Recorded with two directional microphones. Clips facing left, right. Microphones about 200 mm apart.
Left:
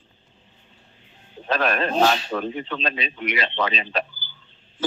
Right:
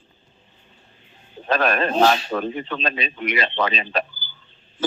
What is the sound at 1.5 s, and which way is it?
A man's voice, 50° right (ahead or behind).